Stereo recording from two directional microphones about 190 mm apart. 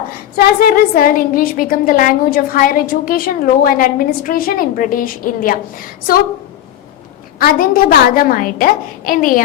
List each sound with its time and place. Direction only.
0.3 s a woman's voice: 50° left (ahead or behind)
7.3 s a woman's voice: 50° left (ahead or behind)